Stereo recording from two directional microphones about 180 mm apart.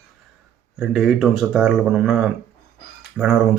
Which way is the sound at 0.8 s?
5° right (ahead or behind).